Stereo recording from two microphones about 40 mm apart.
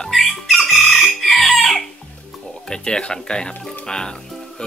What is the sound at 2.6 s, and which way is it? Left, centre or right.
Speech, centre.